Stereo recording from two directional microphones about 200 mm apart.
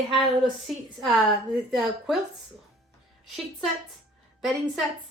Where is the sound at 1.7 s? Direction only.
Centre (ahead or behind).